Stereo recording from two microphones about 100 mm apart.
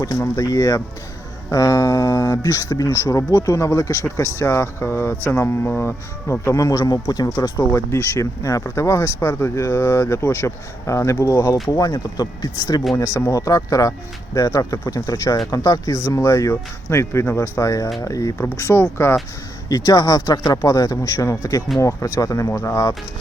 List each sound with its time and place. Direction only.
0.0 s speech: 35° left (ahead or behind)
7.6 s speech: 25° left (ahead or behind)
19.6 s speech: 40° left (ahead or behind)